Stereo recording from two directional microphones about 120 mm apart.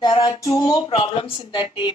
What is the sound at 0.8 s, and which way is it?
A woman's voice, 50° left (ahead or behind).